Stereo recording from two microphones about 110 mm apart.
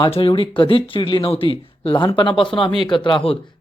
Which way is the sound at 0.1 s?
55° left (ahead or behind).